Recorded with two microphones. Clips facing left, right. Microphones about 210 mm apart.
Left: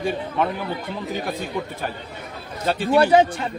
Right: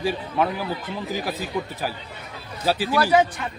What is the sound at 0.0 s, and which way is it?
Speech, 5° right (ahead or behind).